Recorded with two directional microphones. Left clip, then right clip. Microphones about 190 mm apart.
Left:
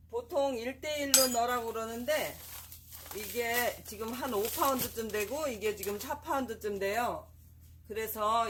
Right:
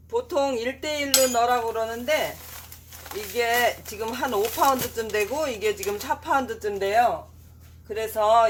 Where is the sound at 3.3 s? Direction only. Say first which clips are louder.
Right 10 dB; 10° left (ahead or behind).